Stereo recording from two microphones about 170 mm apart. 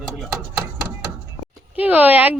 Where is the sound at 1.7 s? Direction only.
10° right (ahead or behind).